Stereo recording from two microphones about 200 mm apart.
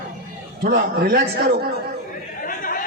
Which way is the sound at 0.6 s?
50° right (ahead or behind).